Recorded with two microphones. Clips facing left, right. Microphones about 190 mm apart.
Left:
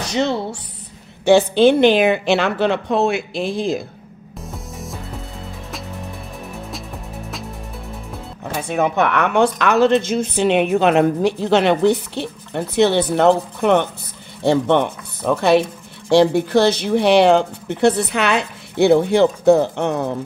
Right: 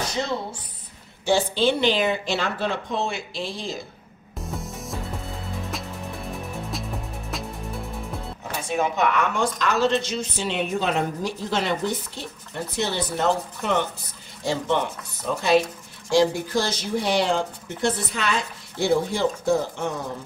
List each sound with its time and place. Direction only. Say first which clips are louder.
0.1 s speech: left 7 dB; 80° left
1.2 s speech: left 9 dB; 60° left (ahead or behind)
4.5 s music: left 1 dB; centre (ahead or behind)
8.5 s speech: left 6 dB; 60° left (ahead or behind)